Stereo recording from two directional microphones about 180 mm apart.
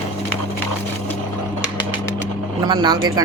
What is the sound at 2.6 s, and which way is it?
Speech, 25° right (ahead or behind).